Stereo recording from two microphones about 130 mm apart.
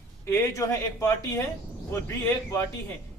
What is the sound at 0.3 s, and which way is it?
Speech, 20° left (ahead or behind).